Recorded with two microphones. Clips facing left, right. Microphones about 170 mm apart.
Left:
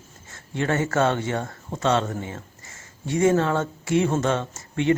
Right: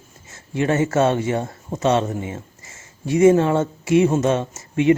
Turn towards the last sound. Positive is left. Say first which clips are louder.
# right 5 dB
turn(degrees=-20)  # may be behind; listen again after turning